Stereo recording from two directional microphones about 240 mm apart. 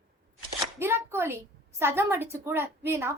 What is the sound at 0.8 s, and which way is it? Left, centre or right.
A woman's voice, centre.